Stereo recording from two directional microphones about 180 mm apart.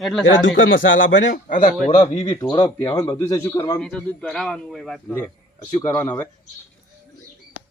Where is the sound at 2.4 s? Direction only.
20° left (ahead or behind).